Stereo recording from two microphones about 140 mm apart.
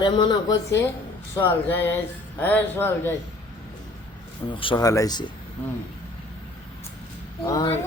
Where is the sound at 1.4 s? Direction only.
15° left (ahead or behind).